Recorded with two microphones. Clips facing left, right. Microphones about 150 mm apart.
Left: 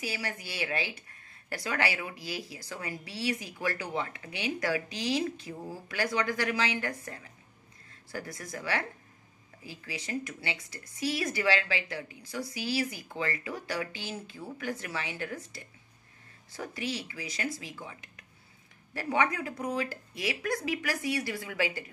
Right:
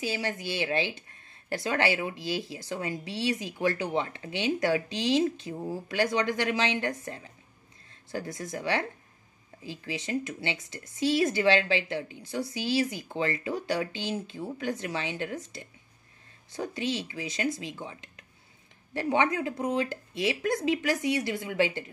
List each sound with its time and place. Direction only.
0.0 s a woman's voice: 25° right (ahead or behind)